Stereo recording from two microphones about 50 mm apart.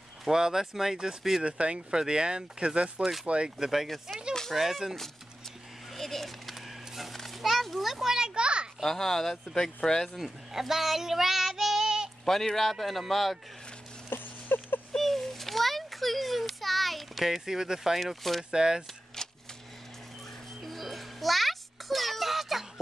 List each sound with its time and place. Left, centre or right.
0.3 s speech: centre
1.4 s speech: right
3.0 s a man's voice: centre
3.3 s speech: right
3.5 s a man's voice: centre
8.8 s speech: centre
10.1 s child singing: centre
12.3 s a man's voice: centre
14.0 s patter: left
15.0 s a sound: centre
18.0 s a man's voice: centre
18.5 s speech: centre
19.2 s typewriter: centre
20.6 s music: centre